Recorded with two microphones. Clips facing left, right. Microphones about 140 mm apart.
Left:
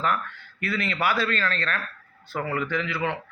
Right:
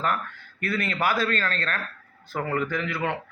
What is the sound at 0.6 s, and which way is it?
A man's voice, 45° right (ahead or behind).